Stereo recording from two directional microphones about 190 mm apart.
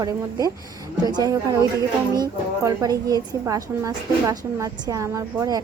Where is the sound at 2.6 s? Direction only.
20° right (ahead or behind).